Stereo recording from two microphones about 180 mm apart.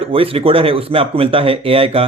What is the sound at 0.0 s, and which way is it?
Speech, 30° right (ahead or behind).